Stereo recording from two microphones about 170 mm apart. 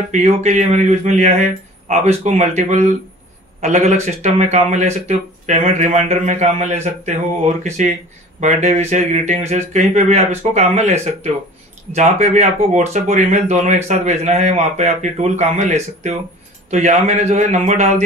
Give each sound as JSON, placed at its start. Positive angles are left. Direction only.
{"t": 0.1, "sound": "speech", "side_deg": -45}